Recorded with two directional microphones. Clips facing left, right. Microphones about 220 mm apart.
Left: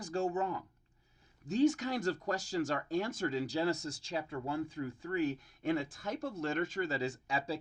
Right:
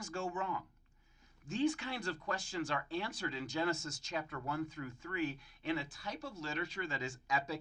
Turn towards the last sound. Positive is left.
turn(degrees=30)  # may be behind; listen again after turning